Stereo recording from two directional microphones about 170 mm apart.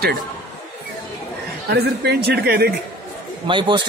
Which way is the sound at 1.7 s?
70° right (ahead or behind).